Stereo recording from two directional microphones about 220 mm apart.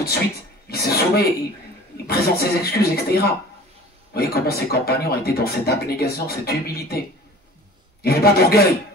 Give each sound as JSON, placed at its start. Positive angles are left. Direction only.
{"t": 0.7, "sound": "speech", "side_deg": 45}
{"t": 8.0, "sound": "speech", "side_deg": 45}